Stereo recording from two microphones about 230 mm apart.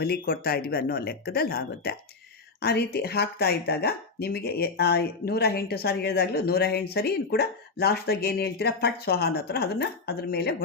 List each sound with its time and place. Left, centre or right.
0.0 s speech: left